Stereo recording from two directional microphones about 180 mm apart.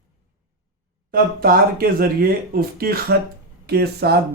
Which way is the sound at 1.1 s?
55° right (ahead or behind).